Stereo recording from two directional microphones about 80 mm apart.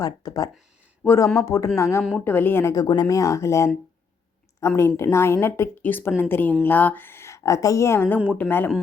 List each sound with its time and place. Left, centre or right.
0.0 s speech: left
1.0 s a woman's voice: left
2.1 s a woman's voice: left
2.7 s speech: left
3.2 s a woman's voice: left
8.4 s a woman's voice: left